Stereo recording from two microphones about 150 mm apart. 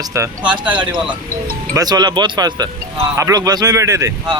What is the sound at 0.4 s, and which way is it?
Speech, 10° right (ahead or behind).